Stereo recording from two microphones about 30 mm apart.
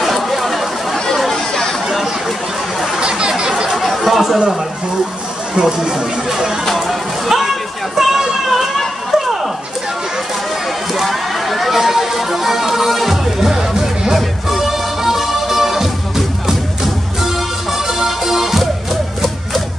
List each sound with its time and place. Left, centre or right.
0.0 s chatter: centre
0.9 s chatter: centre
3.0 s a sound: right
3.7 s chatter: centre
5.6 s speech: right
6.6 s a sound: centre
11.1 s music: centre